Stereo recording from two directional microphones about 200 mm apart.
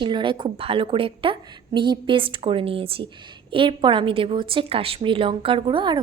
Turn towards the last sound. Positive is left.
turn(degrees=-25)  # may be behind; listen again after turning